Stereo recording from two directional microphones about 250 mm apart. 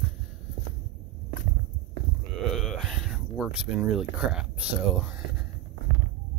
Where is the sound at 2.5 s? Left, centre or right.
Centre.